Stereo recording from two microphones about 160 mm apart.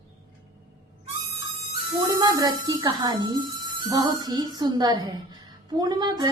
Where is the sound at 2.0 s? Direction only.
25° right (ahead or behind).